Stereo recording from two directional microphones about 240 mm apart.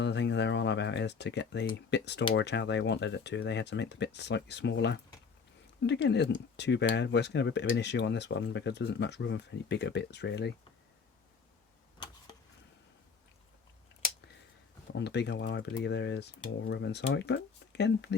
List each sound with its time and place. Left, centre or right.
0.0 s speech: left
14.9 s speech: left